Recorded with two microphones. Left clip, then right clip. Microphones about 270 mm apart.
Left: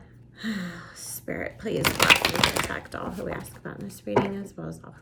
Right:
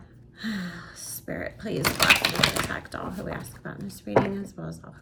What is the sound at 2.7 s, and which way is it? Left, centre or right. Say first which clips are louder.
Speech: left 1 dB; centre.